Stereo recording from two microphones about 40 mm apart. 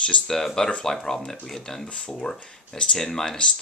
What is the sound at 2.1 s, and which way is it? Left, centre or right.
Speech, centre.